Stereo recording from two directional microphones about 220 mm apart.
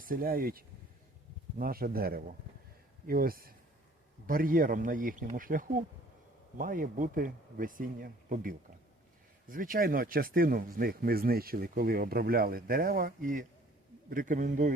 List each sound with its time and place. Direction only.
0.0 s speech: 40° right (ahead or behind)